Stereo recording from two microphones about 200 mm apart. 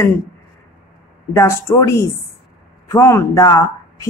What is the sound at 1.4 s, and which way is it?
Speech, 15° left (ahead or behind).